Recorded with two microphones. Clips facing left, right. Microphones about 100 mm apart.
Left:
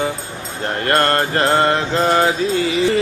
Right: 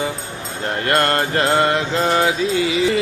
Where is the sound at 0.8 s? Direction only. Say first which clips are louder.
Left 2 dB; 40° left (ahead or behind).